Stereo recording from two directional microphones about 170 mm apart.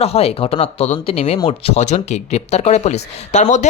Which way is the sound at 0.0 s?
35° left (ahead or behind).